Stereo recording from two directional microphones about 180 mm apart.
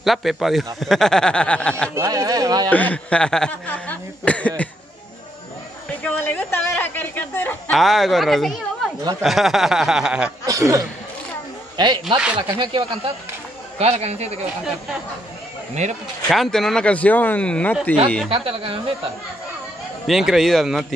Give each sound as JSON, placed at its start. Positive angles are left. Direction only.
{"t": 0.0, "sound": "speech", "side_deg": 0}
{"t": 2.0, "sound": "speech", "side_deg": -20}
{"t": 2.7, "sound": "speech", "side_deg": 10}
{"t": 5.9, "sound": "speech", "side_deg": 10}
{"t": 10.4, "sound": "a man's voice", "side_deg": -20}
{"t": 15.7, "sound": "a man's voice", "side_deg": -40}
{"t": 16.3, "sound": "speech", "side_deg": 0}
{"t": 18.3, "sound": "a man's voice", "side_deg": -30}
{"t": 20.1, "sound": "speech", "side_deg": 0}